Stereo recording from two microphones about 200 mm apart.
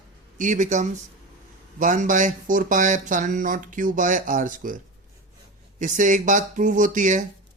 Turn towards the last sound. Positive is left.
turn(degrees=-40)  # may be behind; listen again after turning